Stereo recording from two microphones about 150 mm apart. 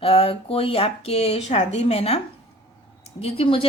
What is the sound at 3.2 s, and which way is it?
Speech, 40° left (ahead or behind).